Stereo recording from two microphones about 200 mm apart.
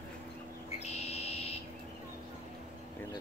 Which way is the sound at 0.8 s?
30° left (ahead or behind).